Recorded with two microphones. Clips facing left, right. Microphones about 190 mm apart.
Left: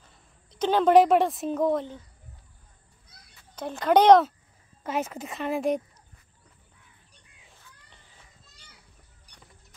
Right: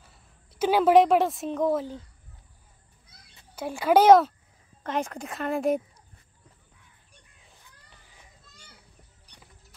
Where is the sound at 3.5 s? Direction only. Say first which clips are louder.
Even; 10° right (ahead or behind).